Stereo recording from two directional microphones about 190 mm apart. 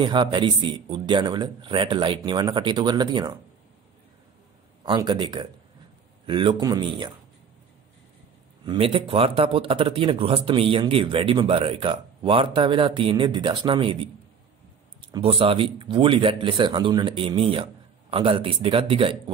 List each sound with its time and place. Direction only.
0.0 s speech: 25° right (ahead or behind)
4.8 s speech: 25° right (ahead or behind)
8.6 s speech: 30° right (ahead or behind)